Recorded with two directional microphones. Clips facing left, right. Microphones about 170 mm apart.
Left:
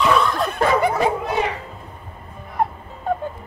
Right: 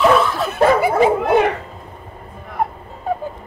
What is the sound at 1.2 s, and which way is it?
Bow-wow, 60° right (ahead or behind).